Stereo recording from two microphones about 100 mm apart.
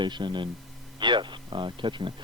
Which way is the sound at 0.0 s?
50° right (ahead or behind).